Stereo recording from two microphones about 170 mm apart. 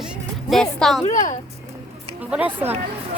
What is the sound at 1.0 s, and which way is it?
Speech, 45° left (ahead or behind).